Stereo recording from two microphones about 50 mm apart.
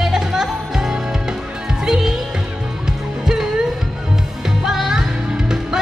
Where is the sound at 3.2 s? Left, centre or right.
Centre.